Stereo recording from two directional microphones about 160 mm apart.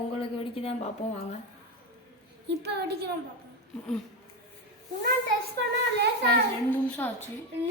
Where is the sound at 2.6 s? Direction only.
90° right.